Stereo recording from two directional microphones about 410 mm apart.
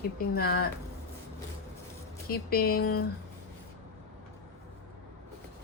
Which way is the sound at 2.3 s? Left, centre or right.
Left.